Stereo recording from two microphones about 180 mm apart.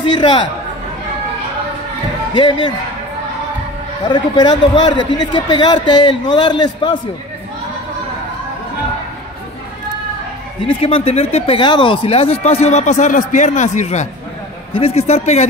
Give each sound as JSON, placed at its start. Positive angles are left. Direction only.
{"t": 0.0, "sound": "a man's voice", "side_deg": 25}
{"t": 2.3, "sound": "a man's voice", "side_deg": 25}
{"t": 4.1, "sound": "a man's voice", "side_deg": 25}
{"t": 10.7, "sound": "speech", "side_deg": 30}